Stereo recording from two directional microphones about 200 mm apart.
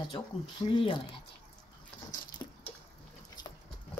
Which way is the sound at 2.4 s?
20° left (ahead or behind).